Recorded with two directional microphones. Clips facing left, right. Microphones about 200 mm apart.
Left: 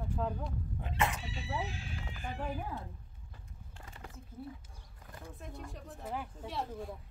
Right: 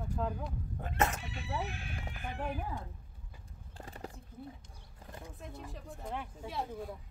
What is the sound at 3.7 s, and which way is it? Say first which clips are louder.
Clip-clop: right 6 dB; 35° right (ahead or behind).